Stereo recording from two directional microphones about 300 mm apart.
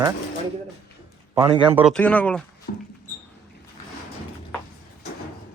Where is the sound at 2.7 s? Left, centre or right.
Left.